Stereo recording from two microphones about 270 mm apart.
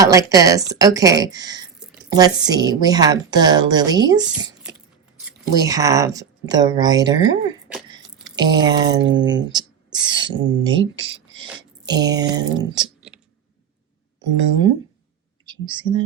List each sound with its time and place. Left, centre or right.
0.0 s a woman's voice: centre
7.7 s a sound: centre
8.4 s a woman's voice: centre
10.9 s a sound: centre
11.4 s speech: centre
14.3 s a woman's voice: centre